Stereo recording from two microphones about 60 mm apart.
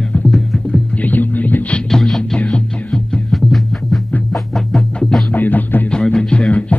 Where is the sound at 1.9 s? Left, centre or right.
Centre.